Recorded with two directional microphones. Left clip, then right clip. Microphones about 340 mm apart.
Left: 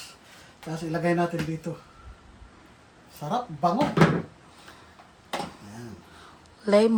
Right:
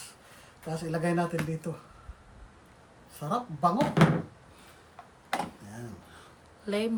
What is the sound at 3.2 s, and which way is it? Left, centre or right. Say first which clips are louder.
Speech: left 2 dB; centre.